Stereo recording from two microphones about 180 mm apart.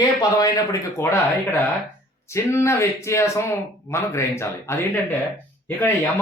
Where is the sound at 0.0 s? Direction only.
20° left (ahead or behind).